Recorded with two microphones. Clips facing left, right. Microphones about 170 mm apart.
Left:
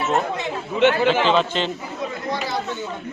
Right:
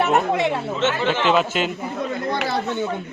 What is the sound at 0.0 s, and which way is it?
Speech, 65° right (ahead or behind).